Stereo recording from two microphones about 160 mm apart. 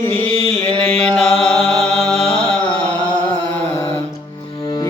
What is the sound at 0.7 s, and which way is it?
Music, 5° left (ahead or behind).